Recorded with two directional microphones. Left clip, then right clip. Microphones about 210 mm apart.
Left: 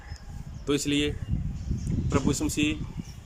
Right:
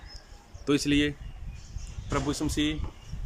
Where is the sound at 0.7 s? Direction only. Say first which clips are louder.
Right 1 dB; centre (ahead or behind).